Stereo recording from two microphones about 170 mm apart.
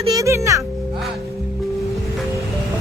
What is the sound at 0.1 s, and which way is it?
Speech, 20° right (ahead or behind).